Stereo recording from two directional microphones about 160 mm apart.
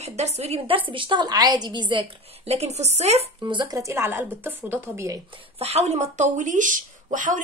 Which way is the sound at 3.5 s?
25° right (ahead or behind).